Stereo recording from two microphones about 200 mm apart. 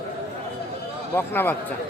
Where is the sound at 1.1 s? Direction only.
10° left (ahead or behind).